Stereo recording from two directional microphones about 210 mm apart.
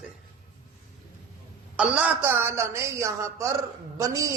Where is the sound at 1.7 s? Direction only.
5° right (ahead or behind).